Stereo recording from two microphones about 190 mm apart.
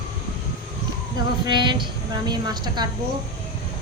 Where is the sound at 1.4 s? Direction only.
25° right (ahead or behind).